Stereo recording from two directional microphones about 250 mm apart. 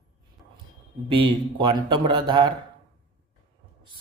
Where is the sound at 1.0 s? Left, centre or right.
Centre.